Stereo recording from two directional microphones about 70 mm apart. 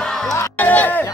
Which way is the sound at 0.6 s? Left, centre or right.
Left.